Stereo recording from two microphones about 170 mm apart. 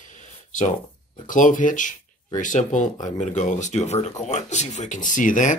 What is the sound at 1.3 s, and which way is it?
Speech, 50° left (ahead or behind).